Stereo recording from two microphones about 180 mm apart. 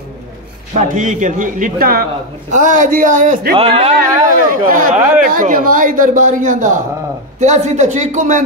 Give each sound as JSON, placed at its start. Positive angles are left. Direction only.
{"t": 0.7, "sound": "speech", "side_deg": -45}
{"t": 3.5, "sound": "speech", "side_deg": -35}
{"t": 4.3, "sound": "speech", "side_deg": -50}
{"t": 4.9, "sound": "speech", "side_deg": -10}
{"t": 5.2, "sound": "speech", "side_deg": -50}